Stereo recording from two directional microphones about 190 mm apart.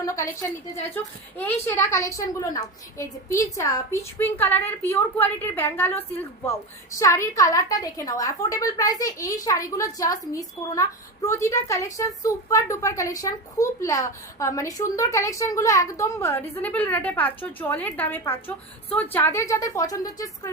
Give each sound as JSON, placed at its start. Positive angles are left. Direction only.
{"t": 0.0, "sound": "a woman's voice", "side_deg": 15}